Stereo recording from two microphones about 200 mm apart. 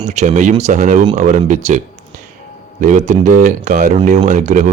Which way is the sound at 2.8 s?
35° right (ahead or behind).